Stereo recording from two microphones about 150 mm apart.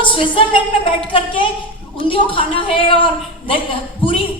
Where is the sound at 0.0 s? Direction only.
35° left (ahead or behind).